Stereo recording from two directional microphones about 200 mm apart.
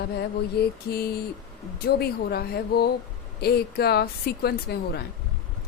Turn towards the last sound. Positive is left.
turn(degrees=50)  # may be behind; listen again after turning